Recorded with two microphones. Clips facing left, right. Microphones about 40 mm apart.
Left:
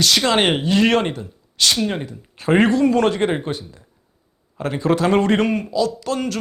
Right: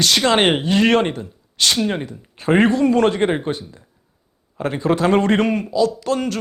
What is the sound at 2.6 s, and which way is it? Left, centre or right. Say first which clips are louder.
Speech: right 1 dB; right.